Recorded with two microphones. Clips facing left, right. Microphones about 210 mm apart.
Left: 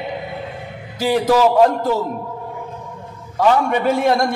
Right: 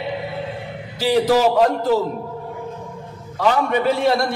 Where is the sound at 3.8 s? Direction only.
45° left (ahead or behind).